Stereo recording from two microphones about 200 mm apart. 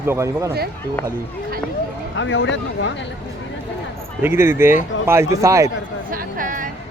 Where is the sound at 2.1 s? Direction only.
70° left (ahead or behind).